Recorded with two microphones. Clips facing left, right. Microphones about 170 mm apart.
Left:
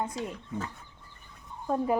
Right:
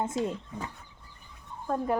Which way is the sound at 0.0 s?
25° right (ahead or behind).